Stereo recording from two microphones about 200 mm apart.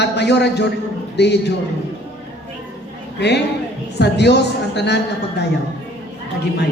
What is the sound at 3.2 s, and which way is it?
A man's voice, 60° left (ahead or behind).